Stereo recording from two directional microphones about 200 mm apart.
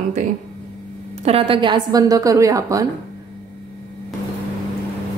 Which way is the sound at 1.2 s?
30° right (ahead or behind).